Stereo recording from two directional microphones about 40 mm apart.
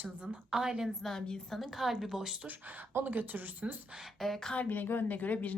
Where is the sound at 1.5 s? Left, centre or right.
Centre.